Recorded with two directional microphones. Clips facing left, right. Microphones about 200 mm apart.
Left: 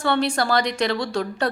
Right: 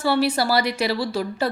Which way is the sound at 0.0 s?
5° right (ahead or behind).